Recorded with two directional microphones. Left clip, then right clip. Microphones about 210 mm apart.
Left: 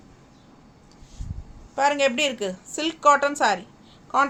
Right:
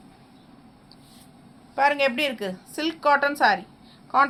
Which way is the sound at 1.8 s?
25° left (ahead or behind).